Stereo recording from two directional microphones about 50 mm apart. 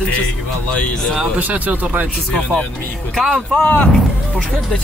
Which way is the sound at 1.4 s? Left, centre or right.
Right.